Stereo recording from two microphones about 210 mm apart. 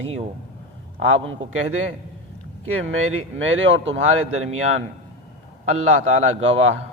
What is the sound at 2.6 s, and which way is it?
Speech, 75° right (ahead or behind).